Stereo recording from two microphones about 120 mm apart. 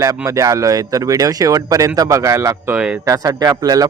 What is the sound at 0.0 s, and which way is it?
Speech, 30° right (ahead or behind).